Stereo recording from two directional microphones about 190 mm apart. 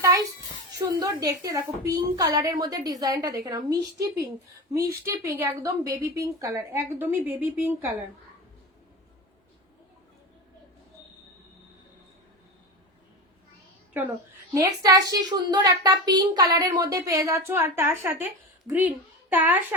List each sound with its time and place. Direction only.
0.8 s a woman's voice: 20° right (ahead or behind)
14.5 s a woman's voice: 20° right (ahead or behind)